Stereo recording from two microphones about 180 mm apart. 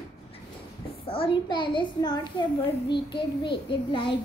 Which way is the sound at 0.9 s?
30° left (ahead or behind).